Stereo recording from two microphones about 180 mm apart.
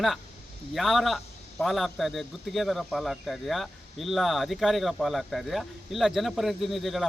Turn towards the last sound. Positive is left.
turn(degrees=0)  # may be behind; listen again after turning